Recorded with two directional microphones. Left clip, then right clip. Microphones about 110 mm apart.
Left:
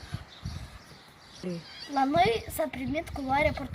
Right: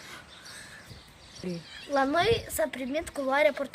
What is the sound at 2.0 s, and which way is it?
A woman's voice, 75° right (ahead or behind).